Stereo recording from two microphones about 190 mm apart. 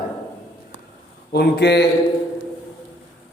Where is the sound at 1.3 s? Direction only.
60° left (ahead or behind).